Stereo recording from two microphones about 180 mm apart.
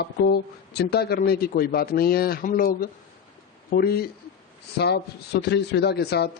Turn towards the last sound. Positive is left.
turn(degrees=65)  # may be behind; listen again after turning